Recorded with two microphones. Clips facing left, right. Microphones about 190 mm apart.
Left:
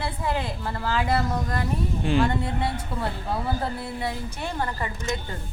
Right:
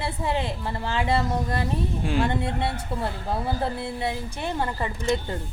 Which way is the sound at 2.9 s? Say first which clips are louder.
Right 1 dB; 25° right (ahead or behind).